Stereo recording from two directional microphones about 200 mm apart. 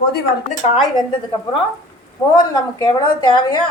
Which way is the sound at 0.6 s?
25° left (ahead or behind).